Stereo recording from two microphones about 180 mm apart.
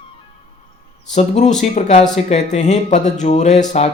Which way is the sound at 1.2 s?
40° left (ahead or behind).